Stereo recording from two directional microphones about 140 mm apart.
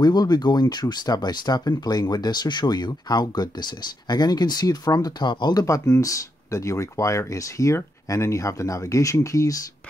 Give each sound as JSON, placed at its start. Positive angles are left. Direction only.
{"t": 0.0, "sound": "speech", "side_deg": 30}